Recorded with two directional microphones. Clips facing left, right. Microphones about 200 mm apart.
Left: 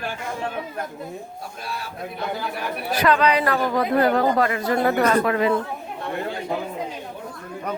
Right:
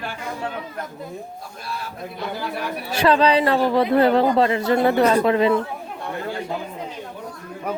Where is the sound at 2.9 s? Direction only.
30° right (ahead or behind).